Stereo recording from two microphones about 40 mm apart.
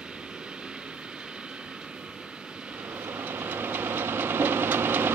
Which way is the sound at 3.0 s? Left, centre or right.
Right.